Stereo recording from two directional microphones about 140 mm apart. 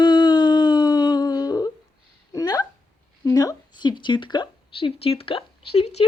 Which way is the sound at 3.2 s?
25° left (ahead or behind).